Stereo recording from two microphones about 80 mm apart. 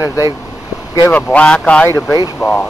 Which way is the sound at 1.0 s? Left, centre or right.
Centre.